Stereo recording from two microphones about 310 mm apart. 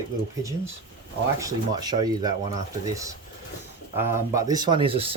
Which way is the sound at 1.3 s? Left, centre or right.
Centre.